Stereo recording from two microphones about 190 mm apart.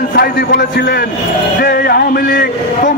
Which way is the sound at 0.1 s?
55° left (ahead or behind).